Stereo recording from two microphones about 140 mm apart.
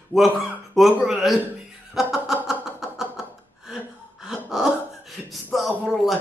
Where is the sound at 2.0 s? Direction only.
5° right (ahead or behind).